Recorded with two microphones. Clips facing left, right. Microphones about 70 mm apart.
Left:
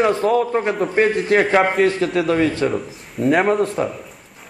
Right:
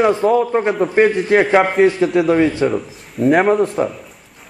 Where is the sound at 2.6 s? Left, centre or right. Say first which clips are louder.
Right 3 dB; centre.